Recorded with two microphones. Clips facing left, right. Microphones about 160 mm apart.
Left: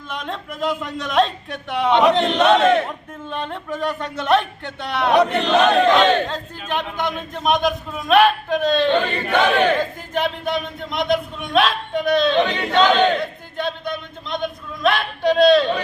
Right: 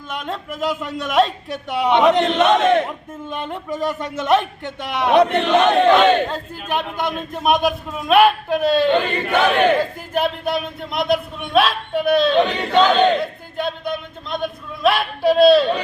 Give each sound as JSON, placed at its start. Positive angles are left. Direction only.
{"t": 0.1, "sound": "speech", "side_deg": -5}